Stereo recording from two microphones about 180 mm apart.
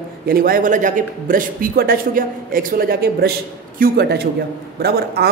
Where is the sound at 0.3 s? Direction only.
55° right (ahead or behind).